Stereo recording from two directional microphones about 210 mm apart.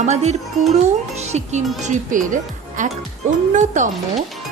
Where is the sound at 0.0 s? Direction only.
35° right (ahead or behind).